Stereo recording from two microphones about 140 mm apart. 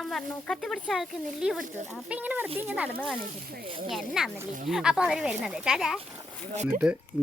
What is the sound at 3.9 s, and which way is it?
A woman's voice, centre (ahead or behind).